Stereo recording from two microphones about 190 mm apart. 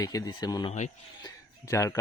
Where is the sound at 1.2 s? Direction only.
15° left (ahead or behind).